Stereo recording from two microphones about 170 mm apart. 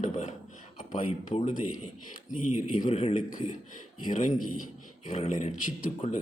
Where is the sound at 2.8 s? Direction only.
40° left (ahead or behind).